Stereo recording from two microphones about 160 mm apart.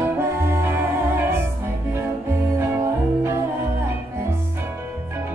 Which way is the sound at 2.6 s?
15° right (ahead or behind).